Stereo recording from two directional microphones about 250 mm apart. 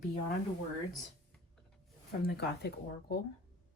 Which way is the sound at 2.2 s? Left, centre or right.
Left.